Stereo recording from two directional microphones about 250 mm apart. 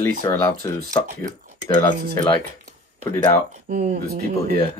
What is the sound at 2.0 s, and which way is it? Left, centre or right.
Speech, right.